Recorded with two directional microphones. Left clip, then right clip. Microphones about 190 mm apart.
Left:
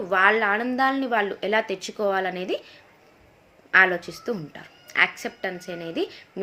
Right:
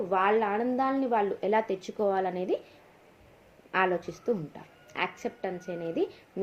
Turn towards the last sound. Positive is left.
turn(degrees=20)  # may be behind; listen again after turning